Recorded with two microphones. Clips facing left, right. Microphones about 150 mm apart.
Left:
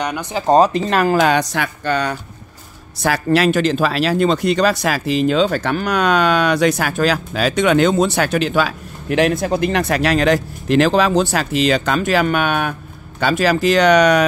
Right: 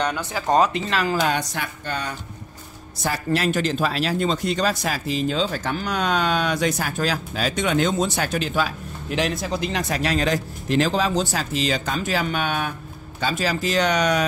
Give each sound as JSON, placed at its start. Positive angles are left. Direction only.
{"t": 0.0, "sound": "speech", "side_deg": 15}
{"t": 0.5, "sound": "speech", "side_deg": 35}
{"t": 1.2, "sound": "speech", "side_deg": 90}